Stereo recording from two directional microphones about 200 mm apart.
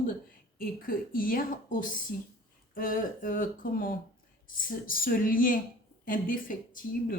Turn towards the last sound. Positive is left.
turn(degrees=45)  # may be behind; listen again after turning